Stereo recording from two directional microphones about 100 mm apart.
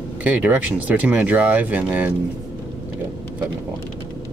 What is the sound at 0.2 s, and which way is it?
Speech, 15° right (ahead or behind).